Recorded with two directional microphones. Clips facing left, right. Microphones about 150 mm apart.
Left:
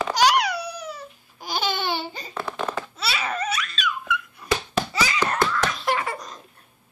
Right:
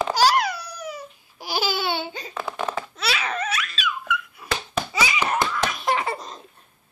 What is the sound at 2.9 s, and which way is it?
Laughter, 5° left (ahead or behind).